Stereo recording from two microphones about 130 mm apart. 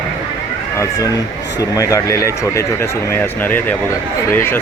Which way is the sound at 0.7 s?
25° left (ahead or behind).